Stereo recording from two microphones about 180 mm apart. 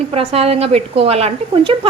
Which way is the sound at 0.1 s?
35° right (ahead or behind).